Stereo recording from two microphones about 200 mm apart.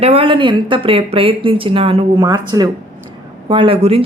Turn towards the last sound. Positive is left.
turn(degrees=-30)  # may be behind; listen again after turning